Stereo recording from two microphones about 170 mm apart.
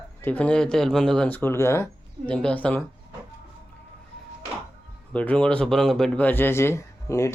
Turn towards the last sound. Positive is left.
turn(degrees=15)  # may be behind; listen again after turning